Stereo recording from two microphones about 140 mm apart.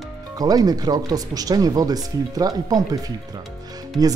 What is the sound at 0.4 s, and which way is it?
Speech, 25° right (ahead or behind).